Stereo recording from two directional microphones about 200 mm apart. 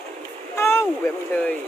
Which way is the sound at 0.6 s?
15° left (ahead or behind).